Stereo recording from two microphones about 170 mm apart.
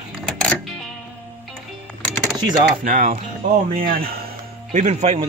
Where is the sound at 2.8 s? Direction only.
55° right (ahead or behind).